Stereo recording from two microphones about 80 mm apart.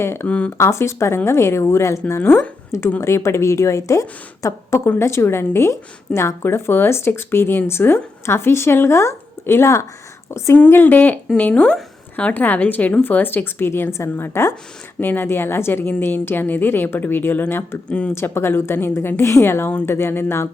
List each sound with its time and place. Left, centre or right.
0.0 s a woman's voice: left
0.3 s speech: centre
0.5 s a woman's voice: left
10.7 s a woman's voice: left
17.8 s speech: centre
18.1 s a woman's voice: left